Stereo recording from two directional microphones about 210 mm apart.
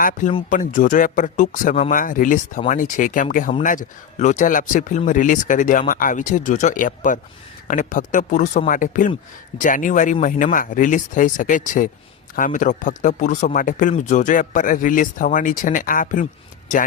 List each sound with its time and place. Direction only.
0.0 s speech: 40° left (ahead or behind)